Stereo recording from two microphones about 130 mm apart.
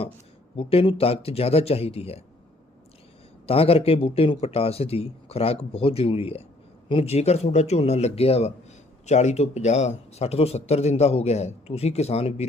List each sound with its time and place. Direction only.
0.5 s a man's voice: 45° left (ahead or behind)
3.4 s a man's voice: 50° left (ahead or behind)